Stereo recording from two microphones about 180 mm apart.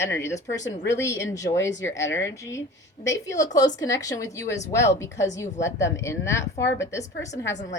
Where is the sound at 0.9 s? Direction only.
15° left (ahead or behind).